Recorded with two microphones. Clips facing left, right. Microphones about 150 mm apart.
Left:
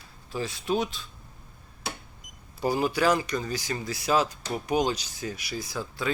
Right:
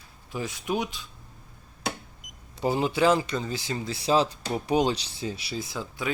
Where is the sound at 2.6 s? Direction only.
25° right (ahead or behind).